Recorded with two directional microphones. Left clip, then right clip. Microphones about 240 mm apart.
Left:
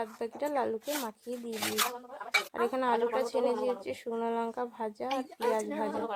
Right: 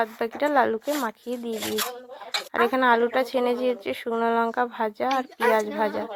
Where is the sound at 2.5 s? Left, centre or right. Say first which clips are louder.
Right 15 dB; right.